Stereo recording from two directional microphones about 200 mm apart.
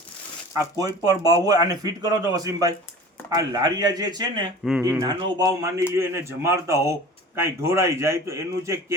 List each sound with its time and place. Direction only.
0.6 s speech: 15° right (ahead or behind)